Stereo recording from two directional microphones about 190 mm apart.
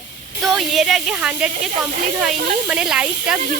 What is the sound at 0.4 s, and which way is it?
Speech, centre (ahead or behind).